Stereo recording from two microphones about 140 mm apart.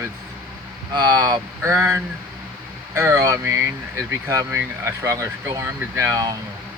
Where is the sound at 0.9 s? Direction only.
30° right (ahead or behind).